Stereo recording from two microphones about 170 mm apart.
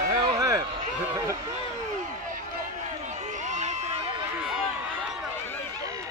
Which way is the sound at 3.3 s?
45° right (ahead or behind).